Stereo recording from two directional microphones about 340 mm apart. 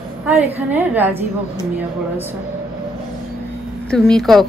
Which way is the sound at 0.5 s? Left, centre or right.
Centre.